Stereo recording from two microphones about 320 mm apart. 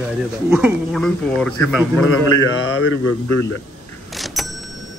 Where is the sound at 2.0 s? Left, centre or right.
Left.